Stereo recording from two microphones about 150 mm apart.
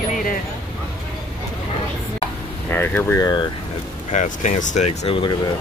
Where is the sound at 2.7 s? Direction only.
15° left (ahead or behind).